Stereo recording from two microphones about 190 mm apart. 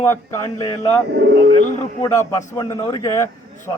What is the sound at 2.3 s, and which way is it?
A man's voice, 15° left (ahead or behind).